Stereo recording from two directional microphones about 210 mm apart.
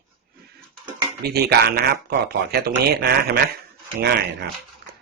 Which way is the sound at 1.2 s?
45° right (ahead or behind).